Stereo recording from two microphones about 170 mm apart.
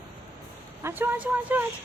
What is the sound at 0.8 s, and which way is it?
Speech, 10° right (ahead or behind).